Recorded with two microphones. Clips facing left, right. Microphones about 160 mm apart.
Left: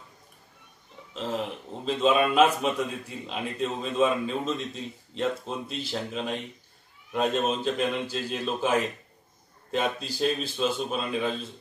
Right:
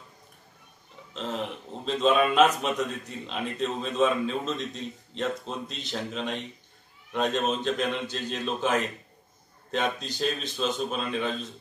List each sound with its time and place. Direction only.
1.1 s a man's voice: 5° left (ahead or behind)